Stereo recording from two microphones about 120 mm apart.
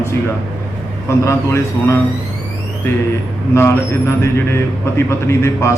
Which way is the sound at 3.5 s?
20° left (ahead or behind).